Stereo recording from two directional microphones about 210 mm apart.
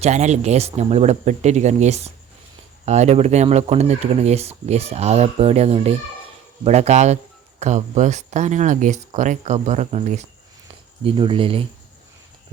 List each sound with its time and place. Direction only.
0.0 s speech: 35° right (ahead or behind)